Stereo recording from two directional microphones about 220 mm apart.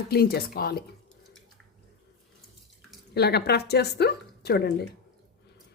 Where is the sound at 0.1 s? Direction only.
45° left (ahead or behind).